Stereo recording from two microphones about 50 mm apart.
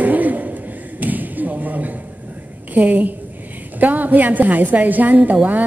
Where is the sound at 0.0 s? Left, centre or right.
Right.